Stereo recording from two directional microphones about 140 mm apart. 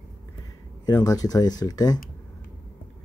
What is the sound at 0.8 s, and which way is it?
Speech, 30° left (ahead or behind).